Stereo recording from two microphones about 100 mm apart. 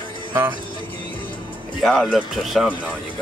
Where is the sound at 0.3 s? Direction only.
20° right (ahead or behind).